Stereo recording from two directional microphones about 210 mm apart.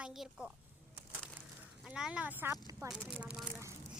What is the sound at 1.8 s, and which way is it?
Speech, 5° right (ahead or behind).